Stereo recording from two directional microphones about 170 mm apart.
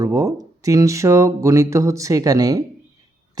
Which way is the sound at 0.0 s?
20° right (ahead or behind).